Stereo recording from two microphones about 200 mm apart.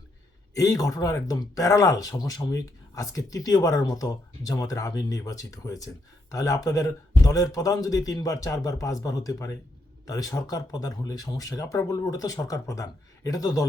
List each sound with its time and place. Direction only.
0.5 s speech: 15° left (ahead or behind)